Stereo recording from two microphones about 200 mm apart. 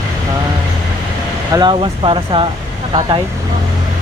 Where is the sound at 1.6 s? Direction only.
25° right (ahead or behind).